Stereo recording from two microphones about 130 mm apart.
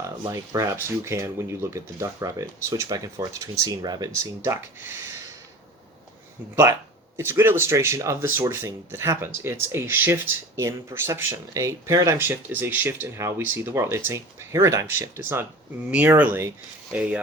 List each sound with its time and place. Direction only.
0.3 s speech: 25° right (ahead or behind)
4.4 s speech: 15° right (ahead or behind)
7.2 s speech: 20° right (ahead or behind)